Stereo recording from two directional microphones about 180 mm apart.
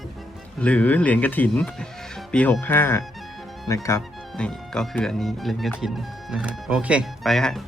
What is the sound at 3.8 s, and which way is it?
Music, 15° left (ahead or behind).